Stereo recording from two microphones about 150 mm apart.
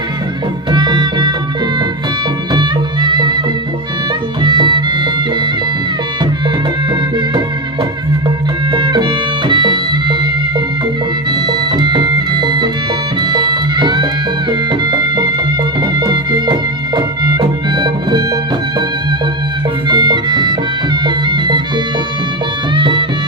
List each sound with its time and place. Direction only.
0.7 s music: 30° right (ahead or behind)
2.5 s music: 30° right (ahead or behind)
4.4 s music: 30° right (ahead or behind)
8.7 s music: 30° right (ahead or behind)
11.3 s music: 30° right (ahead or behind)
19.9 s music: 30° right (ahead or behind)
22.7 s music: 30° right (ahead or behind)